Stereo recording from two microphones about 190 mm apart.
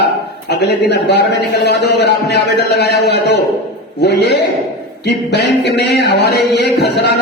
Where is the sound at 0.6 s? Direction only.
65° left (ahead or behind).